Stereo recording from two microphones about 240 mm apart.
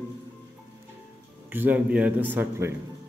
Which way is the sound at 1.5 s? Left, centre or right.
Centre.